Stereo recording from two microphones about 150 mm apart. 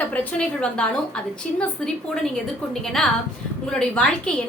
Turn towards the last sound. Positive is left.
turn(degrees=5)  # may be behind; listen again after turning